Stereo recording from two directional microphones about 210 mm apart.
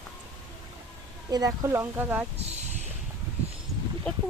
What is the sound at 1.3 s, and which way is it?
Speech, 15° right (ahead or behind).